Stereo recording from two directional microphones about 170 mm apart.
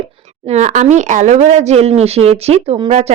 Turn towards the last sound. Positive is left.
turn(degrees=-40)  # may be behind; listen again after turning